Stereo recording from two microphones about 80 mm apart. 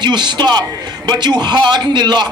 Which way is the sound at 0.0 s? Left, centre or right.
Right.